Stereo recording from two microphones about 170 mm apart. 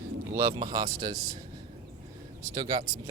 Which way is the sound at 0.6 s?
20° right (ahead or behind).